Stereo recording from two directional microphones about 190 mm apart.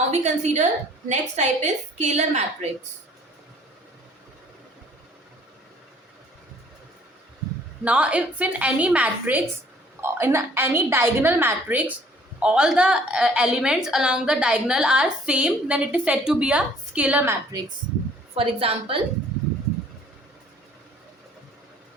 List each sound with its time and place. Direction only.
0.1 s a woman's voice: 35° right (ahead or behind)
7.9 s a woman's voice: 5° right (ahead or behind)
18.3 s a woman's voice: 30° right (ahead or behind)